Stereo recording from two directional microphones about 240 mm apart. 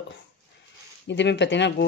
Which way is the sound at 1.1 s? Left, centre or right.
Left.